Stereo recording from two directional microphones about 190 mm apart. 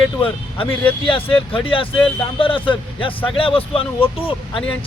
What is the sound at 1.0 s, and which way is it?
Speech, 25° left (ahead or behind).